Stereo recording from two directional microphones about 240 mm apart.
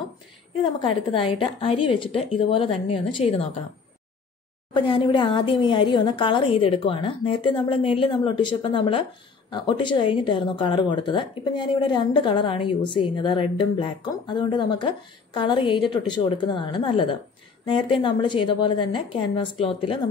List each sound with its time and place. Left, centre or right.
0.7 s speech: left
4.7 s speech: centre